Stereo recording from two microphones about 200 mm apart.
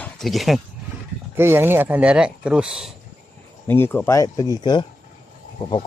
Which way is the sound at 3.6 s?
10° left (ahead or behind).